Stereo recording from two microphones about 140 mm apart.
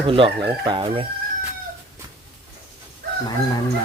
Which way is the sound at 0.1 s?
35° right (ahead or behind).